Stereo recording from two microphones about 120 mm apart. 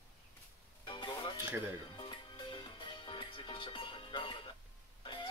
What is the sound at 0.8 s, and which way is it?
Music, 45° left (ahead or behind).